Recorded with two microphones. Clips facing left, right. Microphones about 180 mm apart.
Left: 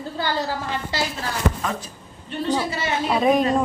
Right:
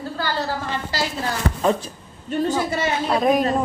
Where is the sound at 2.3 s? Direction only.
45° right (ahead or behind).